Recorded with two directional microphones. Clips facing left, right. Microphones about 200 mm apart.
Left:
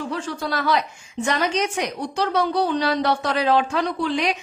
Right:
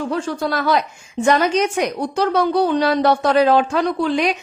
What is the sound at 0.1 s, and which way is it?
Speech, 45° right (ahead or behind).